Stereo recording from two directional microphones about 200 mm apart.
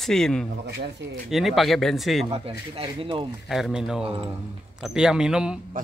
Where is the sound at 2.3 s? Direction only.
25° right (ahead or behind).